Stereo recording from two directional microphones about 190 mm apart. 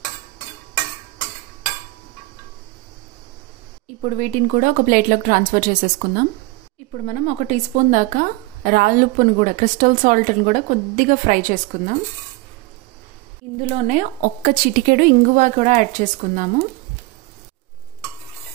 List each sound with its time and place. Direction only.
4.0 s a woman's voice: 40° right (ahead or behind)
13.7 s a woman's voice: 40° right (ahead or behind)